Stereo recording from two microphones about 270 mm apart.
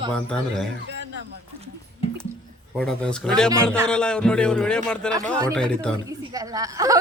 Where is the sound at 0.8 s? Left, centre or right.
Right.